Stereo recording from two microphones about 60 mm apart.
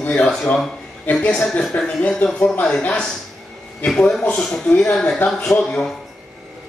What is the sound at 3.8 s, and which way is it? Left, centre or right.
Speech, centre.